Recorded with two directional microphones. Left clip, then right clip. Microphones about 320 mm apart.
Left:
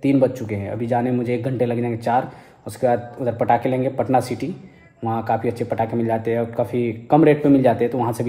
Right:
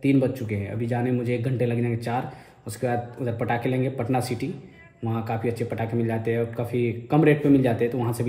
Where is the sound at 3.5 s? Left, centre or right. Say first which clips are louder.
Left 8 dB; centre.